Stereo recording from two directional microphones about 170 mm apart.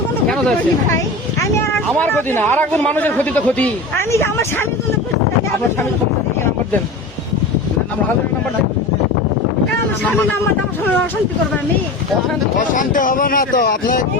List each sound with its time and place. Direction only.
0.9 s a man's voice: 15° left (ahead or behind)
12.5 s speech: 50° left (ahead or behind)